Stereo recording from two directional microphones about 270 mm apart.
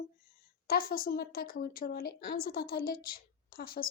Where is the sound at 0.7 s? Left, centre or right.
Left.